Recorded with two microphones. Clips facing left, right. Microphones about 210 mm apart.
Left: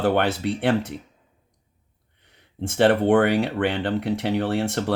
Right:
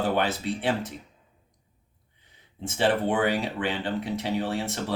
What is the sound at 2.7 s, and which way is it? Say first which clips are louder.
Speech: left 7 dB; 60° left (ahead or behind).